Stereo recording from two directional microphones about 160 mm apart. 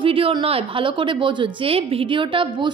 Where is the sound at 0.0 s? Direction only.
35° right (ahead or behind).